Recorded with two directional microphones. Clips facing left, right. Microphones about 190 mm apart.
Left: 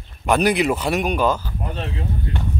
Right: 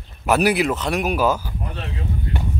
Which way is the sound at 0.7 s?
5° left (ahead or behind).